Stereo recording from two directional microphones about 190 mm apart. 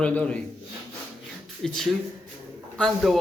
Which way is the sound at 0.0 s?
5° left (ahead or behind).